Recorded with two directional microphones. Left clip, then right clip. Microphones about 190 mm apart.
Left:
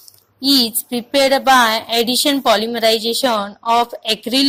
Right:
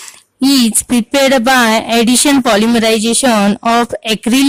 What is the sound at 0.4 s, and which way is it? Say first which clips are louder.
A woman's voice: right 3 dB; 30° right (ahead or behind).